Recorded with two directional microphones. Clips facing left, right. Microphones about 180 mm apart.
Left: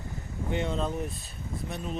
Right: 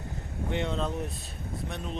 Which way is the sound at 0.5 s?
Centre (ahead or behind).